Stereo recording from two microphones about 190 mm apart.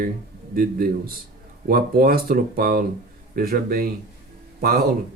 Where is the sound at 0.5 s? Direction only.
50° right (ahead or behind).